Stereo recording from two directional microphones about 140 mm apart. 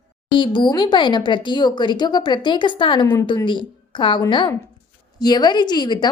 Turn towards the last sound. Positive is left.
turn(degrees=30)  # may be behind; listen again after turning